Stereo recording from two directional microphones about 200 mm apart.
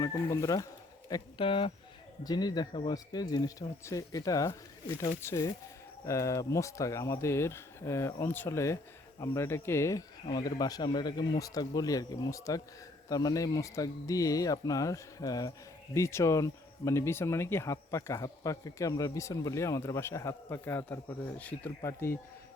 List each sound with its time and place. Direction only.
0.0 s speech: 15° left (ahead or behind)